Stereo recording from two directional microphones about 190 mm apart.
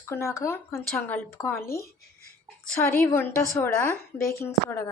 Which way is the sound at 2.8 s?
10° left (ahead or behind).